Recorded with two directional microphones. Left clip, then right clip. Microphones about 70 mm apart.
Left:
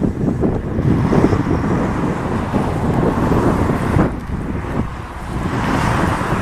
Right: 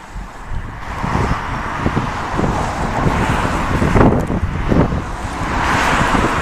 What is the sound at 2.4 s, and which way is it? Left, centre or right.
Vehicle, right.